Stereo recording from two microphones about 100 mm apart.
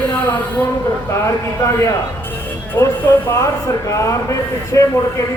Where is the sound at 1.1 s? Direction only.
30° left (ahead or behind).